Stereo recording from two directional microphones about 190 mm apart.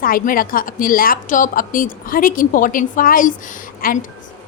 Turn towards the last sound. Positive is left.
turn(degrees=50)  # may be behind; listen again after turning